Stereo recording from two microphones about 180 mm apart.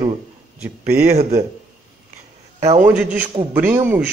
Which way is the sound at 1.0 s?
40° right (ahead or behind).